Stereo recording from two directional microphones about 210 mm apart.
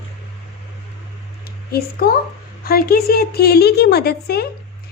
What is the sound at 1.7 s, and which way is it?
A woman's voice, 45° left (ahead or behind).